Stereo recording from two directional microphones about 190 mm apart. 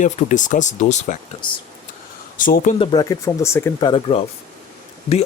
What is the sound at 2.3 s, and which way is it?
Speech, 45° left (ahead or behind).